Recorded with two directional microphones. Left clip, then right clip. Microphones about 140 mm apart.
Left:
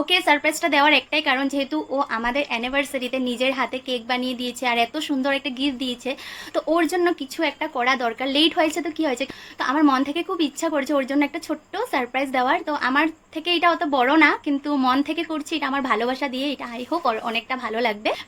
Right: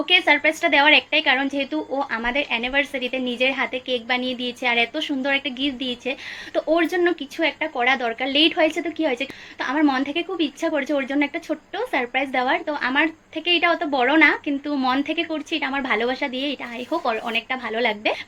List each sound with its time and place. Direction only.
0.0 s speech: 30° left (ahead or behind)